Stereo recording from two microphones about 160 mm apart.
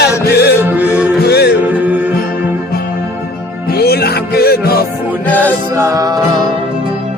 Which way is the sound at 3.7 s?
80° left.